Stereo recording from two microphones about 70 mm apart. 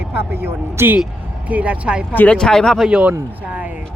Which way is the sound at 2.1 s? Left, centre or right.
Left.